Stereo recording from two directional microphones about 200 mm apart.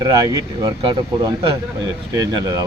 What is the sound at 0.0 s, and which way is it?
Speech, 20° right (ahead or behind).